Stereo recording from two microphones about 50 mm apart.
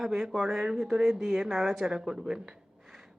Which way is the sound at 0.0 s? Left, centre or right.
Centre.